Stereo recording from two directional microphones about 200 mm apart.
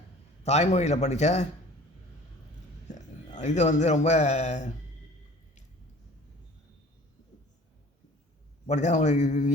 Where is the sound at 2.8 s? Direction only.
35° left (ahead or behind).